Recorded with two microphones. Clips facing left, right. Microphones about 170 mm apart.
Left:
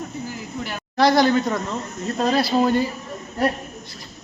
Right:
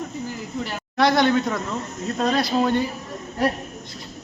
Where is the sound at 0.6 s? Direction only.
Centre (ahead or behind).